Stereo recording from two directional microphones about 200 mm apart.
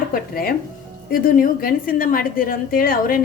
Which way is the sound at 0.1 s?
45° left (ahead or behind).